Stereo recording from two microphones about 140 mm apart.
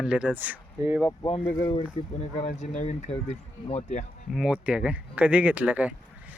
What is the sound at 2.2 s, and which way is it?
Speech, 60° left (ahead or behind).